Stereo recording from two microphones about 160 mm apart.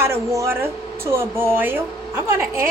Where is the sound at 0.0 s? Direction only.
15° right (ahead or behind).